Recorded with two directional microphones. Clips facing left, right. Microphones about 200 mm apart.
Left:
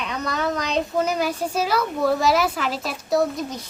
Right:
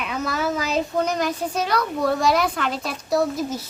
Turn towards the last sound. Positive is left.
turn(degrees=-5)  # may be behind; listen again after turning